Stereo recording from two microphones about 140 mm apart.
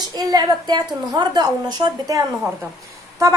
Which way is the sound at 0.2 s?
25° right (ahead or behind).